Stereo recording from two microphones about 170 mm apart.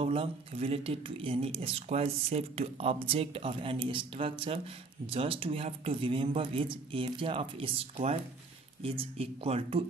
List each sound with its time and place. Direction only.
0.0 s speech: 35° right (ahead or behind)